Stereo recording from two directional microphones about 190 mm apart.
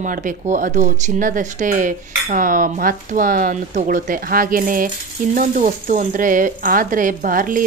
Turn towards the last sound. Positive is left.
turn(degrees=-45)  # may be behind; listen again after turning